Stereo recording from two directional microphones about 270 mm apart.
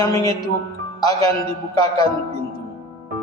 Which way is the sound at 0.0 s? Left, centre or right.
Centre.